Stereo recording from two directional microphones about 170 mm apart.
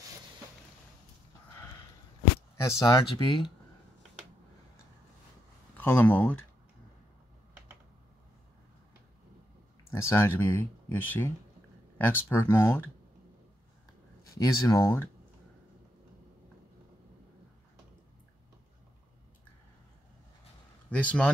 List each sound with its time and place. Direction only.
2.8 s speech: 20° left (ahead or behind)
5.8 s speech: 10° left (ahead or behind)
9.8 s speech: 15° left (ahead or behind)
14.3 s speech: 20° left (ahead or behind)
20.9 s speech: 10° left (ahead or behind)